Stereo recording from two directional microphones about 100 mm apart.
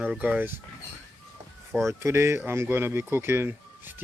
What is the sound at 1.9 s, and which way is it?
Speech, 25° right (ahead or behind).